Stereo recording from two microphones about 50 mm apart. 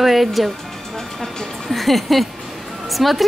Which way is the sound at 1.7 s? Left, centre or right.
Centre.